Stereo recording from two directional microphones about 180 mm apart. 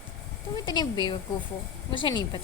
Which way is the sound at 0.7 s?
25° left (ahead or behind).